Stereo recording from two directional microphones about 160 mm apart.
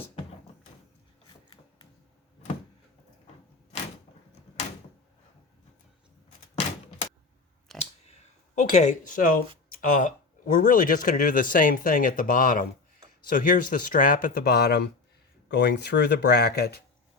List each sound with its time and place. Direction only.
7.7 s clicking: centre (ahead or behind)
8.5 s speech: 50° left (ahead or behind); by 16.8 s 90° left